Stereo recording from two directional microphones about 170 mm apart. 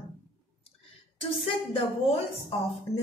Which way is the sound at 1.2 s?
35° left (ahead or behind).